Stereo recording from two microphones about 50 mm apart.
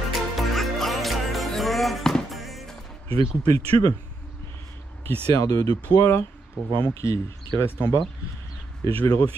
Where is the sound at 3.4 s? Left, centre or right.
Left.